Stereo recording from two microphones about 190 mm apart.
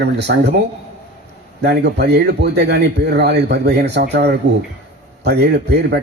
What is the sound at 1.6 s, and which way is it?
A man's voice, 60° right (ahead or behind).